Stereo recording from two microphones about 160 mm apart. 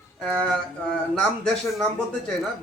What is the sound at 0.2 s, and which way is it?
Speech, 5° left (ahead or behind).